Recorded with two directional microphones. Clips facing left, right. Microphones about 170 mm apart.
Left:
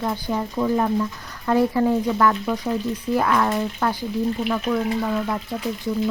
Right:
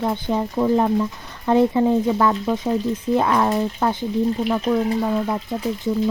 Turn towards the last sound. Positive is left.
turn(degrees=-20)  # may be behind; listen again after turning